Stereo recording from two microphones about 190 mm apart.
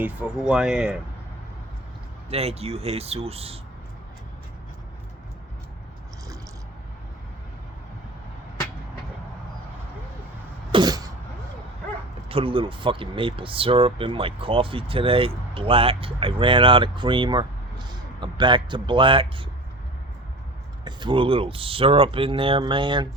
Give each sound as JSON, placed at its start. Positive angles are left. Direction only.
{"t": 0.0, "sound": "speech", "side_deg": -5}
{"t": 2.3, "sound": "speech", "side_deg": -35}
{"t": 10.7, "sound": "cough", "side_deg": -20}
{"t": 12.3, "sound": "speech", "side_deg": -30}
{"t": 20.8, "sound": "speech", "side_deg": -25}